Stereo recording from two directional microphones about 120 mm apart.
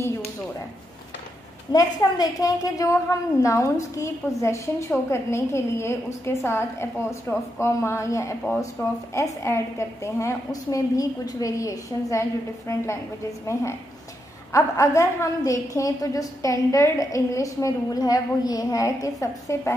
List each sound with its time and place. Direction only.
1.7 s a woman's voice: 30° left (ahead or behind)
14.5 s a woman's voice: 25° left (ahead or behind)